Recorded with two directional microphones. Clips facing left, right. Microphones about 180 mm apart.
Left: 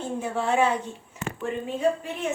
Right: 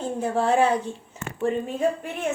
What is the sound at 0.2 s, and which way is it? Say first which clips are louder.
Speech: right 3 dB; 35° right (ahead or behind).